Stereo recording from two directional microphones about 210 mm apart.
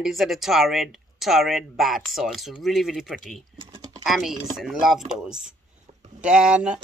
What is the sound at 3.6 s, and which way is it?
Typing, 20° right (ahead or behind).